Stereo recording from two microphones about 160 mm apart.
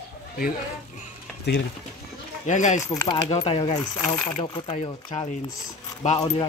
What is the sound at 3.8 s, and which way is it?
Speech, 10° left (ahead or behind).